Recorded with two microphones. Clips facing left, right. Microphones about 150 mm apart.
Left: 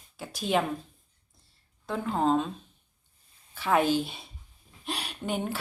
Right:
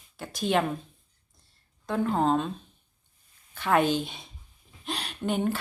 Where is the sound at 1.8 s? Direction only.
Centre (ahead or behind).